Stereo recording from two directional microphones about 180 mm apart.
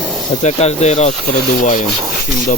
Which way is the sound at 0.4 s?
40° left (ahead or behind).